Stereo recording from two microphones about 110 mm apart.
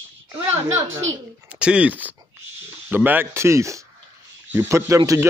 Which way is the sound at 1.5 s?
10° right (ahead or behind).